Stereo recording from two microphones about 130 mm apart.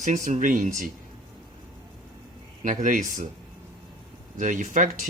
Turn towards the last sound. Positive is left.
turn(degrees=-75)  # may be behind; listen again after turning